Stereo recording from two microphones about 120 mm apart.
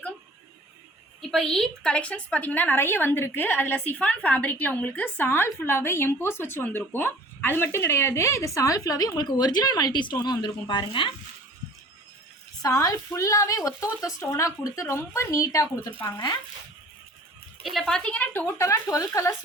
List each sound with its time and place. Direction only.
1.2 s a woman's voice: centre (ahead or behind); by 11.1 s 45° left (ahead or behind)
12.6 s speech: 25° left (ahead or behind)
17.6 s a woman's voice: centre (ahead or behind); by 19.3 s 25° left (ahead or behind)